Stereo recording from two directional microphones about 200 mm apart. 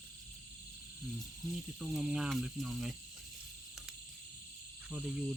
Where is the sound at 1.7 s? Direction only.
Centre (ahead or behind).